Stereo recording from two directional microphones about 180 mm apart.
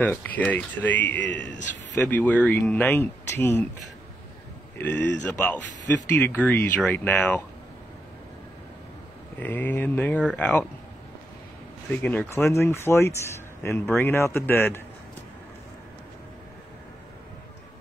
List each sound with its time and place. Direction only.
0.0 s speech: 10° left (ahead or behind)
1.2 s speech: 75° left (ahead or behind)
2.0 s speech: 10° left (ahead or behind)
4.7 s speech: 10° left (ahead or behind)
9.4 s speech: 10° left (ahead or behind)
11.9 s speech: 10° left (ahead or behind)